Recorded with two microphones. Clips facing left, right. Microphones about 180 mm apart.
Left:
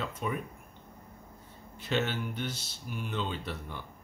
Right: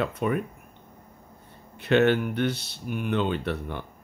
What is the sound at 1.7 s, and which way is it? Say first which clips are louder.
Speech: right 11 dB; 65° right (ahead or behind).